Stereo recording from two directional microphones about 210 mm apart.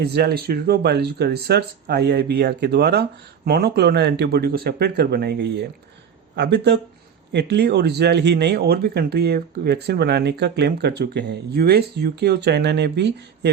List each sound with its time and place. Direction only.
0.0 s speech: 50° right (ahead or behind)